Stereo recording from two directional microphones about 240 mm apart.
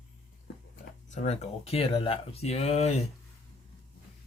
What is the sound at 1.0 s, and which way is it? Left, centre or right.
Speech, left.